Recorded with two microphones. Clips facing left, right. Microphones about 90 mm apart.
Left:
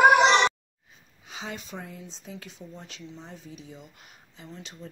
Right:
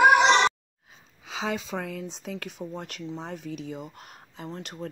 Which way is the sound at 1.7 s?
85° right.